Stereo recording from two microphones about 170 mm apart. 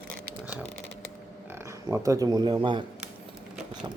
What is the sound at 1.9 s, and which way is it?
Speech, 20° right (ahead or behind).